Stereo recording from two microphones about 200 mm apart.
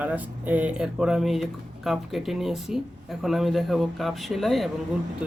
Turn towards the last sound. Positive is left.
turn(degrees=-5)  # may be behind; listen again after turning